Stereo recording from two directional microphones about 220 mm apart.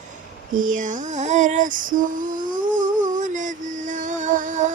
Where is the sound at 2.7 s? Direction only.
35° right (ahead or behind).